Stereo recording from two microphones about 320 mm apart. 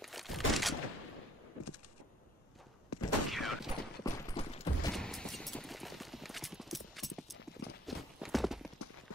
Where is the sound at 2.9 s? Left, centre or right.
Left.